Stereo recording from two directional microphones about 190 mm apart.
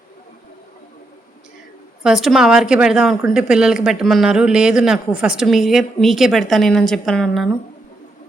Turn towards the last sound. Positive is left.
turn(degrees=5)  # may be behind; listen again after turning